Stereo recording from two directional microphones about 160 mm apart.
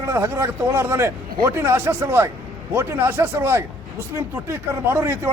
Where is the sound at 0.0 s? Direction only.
15° right (ahead or behind).